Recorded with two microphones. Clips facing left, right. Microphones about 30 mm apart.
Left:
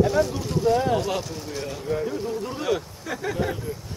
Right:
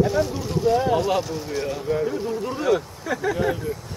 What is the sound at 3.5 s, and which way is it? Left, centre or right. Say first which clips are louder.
Speech: right 5 dB; centre.